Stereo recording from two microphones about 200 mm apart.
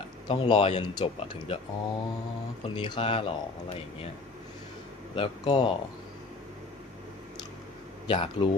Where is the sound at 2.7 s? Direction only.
25° left (ahead or behind).